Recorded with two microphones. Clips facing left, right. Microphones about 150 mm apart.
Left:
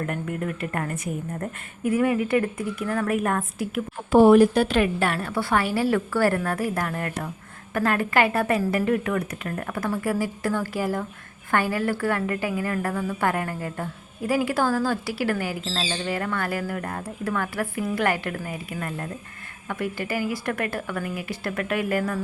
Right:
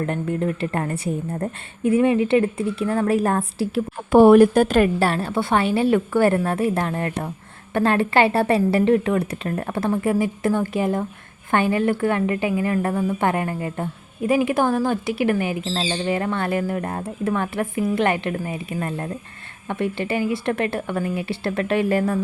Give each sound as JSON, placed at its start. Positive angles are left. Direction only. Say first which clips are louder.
{"t": 0.0, "sound": "speech", "louder": "right 5 dB", "side_deg": -30}
{"t": 4.1, "sound": "speech", "louder": "right 3 dB", "side_deg": -60}